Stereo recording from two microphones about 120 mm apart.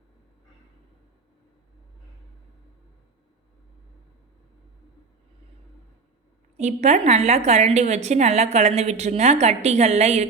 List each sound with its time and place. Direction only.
6.6 s a woman's voice: 70° right (ahead or behind)